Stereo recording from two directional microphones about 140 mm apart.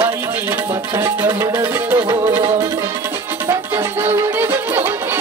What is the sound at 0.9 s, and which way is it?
Music, 20° right (ahead or behind).